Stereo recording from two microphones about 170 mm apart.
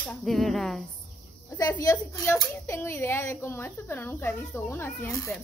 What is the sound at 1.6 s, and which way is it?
A woman's voice, 20° left (ahead or behind).